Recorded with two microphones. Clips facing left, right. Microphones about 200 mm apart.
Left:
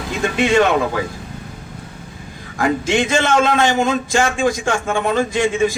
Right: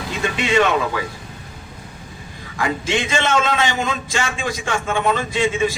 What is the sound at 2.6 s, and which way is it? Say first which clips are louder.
A man's voice: left 5 dB; 50° left (ahead or behind).